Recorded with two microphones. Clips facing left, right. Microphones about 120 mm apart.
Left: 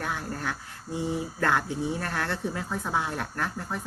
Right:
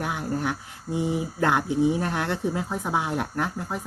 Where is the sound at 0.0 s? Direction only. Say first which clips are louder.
Right 5 dB; 15° right (ahead or behind).